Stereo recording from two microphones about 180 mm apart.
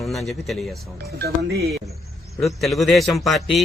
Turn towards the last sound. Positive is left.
turn(degrees=0)  # may be behind; listen again after turning